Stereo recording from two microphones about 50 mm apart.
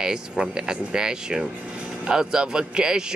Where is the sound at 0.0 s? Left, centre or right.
Centre.